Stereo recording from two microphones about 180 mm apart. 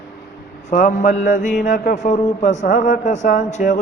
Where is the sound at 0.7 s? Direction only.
45° left (ahead or behind).